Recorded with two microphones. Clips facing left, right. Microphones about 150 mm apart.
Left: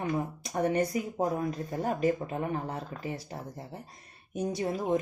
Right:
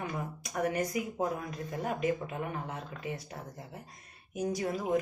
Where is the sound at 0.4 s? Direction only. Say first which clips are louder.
Left 3 dB; 30° left (ahead or behind).